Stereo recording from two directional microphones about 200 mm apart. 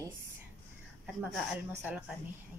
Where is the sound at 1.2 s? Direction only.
5° right (ahead or behind).